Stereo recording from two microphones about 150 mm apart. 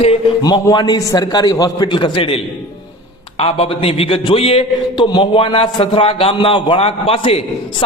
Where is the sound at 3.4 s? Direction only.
40° left (ahead or behind).